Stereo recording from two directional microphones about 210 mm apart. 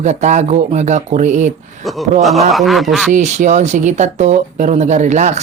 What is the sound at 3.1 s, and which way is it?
Speech, 35° right (ahead or behind).